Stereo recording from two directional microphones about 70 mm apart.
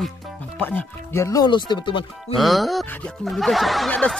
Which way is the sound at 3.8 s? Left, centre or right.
Centre.